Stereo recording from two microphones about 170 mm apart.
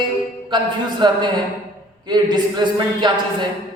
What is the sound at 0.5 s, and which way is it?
Speech, 25° right (ahead or behind).